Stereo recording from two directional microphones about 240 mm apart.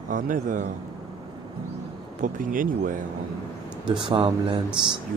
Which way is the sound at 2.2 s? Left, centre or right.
Right.